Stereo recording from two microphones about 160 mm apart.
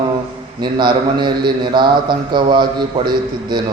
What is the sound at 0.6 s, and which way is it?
A man's voice, 30° right (ahead or behind).